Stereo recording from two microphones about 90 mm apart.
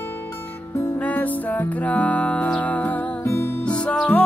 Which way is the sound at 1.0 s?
20° left (ahead or behind).